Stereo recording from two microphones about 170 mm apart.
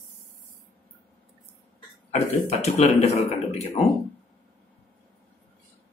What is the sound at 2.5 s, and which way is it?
Speech, 40° left (ahead or behind).